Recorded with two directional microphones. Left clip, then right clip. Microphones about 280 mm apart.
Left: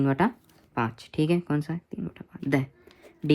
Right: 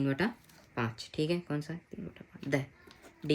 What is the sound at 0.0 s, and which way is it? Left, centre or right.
Speech, centre.